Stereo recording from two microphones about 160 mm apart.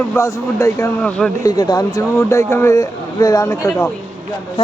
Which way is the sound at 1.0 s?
5° left (ahead or behind).